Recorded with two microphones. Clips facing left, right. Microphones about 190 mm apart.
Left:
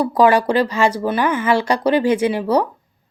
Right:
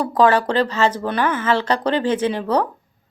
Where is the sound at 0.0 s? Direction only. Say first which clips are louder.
Left 2 dB; 10° left (ahead or behind).